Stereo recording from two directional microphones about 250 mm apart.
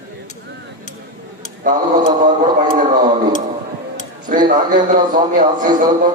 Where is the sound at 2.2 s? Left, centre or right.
Right.